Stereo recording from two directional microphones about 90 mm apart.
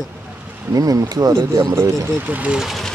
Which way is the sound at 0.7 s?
40° right (ahead or behind).